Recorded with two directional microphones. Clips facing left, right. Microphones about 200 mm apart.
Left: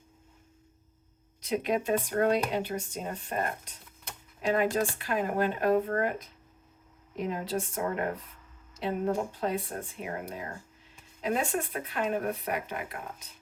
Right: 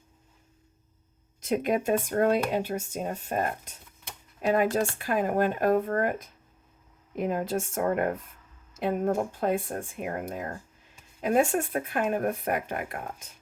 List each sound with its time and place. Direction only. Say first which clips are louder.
1.4 s speech: right 3 dB; 50° right (ahead or behind)